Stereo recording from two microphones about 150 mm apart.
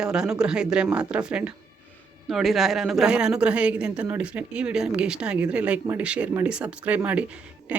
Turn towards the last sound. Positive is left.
turn(degrees=-5)  # may be behind; listen again after turning